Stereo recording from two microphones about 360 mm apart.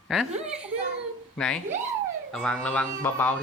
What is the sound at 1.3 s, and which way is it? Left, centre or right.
A man's voice, centre.